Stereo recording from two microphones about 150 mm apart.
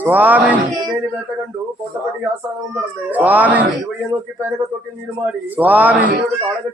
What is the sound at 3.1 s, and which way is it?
Speech, 10° right (ahead or behind).